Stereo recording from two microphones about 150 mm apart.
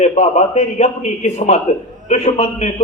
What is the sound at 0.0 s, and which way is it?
A man's voice, 45° left (ahead or behind).